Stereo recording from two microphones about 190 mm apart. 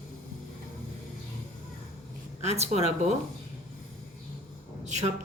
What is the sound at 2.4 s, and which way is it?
Speech, 35° right (ahead or behind).